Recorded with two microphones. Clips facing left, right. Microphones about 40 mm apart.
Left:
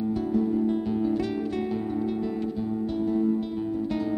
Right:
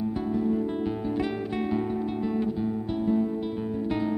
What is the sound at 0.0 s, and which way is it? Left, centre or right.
Music, centre.